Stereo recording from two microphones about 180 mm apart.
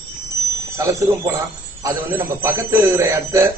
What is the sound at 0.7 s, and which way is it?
A man's voice, 15° right (ahead or behind).